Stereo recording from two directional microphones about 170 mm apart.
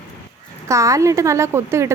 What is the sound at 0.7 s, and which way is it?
Speech, 20° right (ahead or behind).